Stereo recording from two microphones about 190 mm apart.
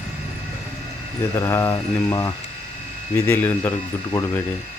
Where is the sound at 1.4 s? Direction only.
15° left (ahead or behind).